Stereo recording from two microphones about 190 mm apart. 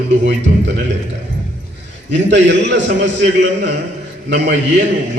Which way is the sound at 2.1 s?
65° right (ahead or behind).